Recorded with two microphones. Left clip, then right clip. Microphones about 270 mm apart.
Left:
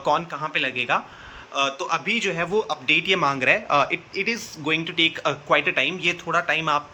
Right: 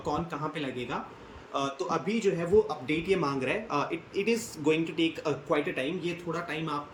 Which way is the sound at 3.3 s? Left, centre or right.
Left.